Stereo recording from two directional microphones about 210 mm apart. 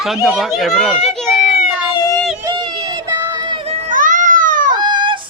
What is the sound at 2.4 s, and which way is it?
Run, 20° right (ahead or behind).